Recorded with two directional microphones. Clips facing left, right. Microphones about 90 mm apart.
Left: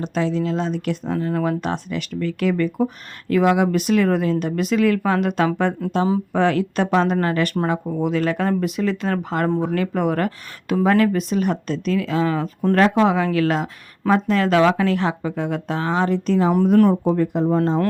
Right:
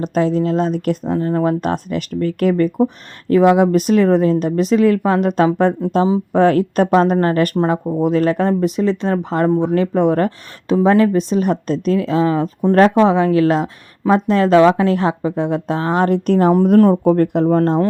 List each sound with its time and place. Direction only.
0.0 s speech: 45° right (ahead or behind)
1.1 s speech: 35° right (ahead or behind); by 16.5 s 55° right (ahead or behind)
16.7 s speech: 35° right (ahead or behind)
17.0 s speech: 65° right (ahead or behind)